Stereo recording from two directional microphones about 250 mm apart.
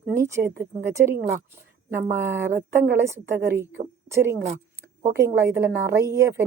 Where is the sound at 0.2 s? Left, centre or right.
Centre.